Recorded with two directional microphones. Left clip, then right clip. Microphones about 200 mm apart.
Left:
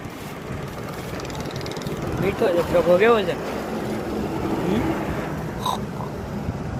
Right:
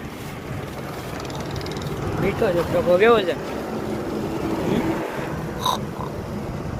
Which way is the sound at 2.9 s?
5° right (ahead or behind).